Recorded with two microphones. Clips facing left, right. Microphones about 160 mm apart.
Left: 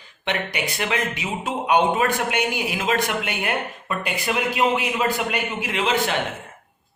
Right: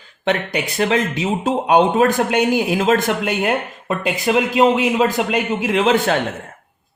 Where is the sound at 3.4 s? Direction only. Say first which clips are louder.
Right 6 dB; 25° right (ahead or behind).